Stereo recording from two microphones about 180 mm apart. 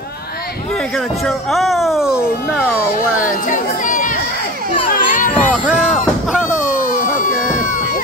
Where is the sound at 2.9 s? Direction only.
50° left (ahead or behind).